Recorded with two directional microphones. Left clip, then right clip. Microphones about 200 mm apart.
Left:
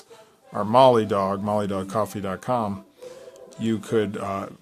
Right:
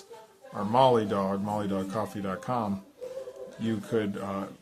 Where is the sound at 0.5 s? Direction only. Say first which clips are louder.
Left 6 dB; 55° left (ahead or behind).